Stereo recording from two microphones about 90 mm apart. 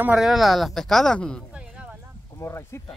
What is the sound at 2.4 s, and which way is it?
Speech, 30° left (ahead or behind).